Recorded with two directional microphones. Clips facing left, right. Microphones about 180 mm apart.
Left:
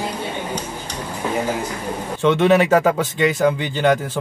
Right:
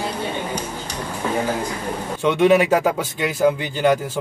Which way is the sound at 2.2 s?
10° right (ahead or behind).